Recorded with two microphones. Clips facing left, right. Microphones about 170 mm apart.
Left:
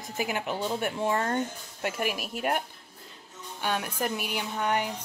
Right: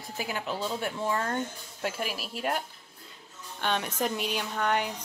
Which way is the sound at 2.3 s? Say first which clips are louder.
Even; 50° left (ahead or behind).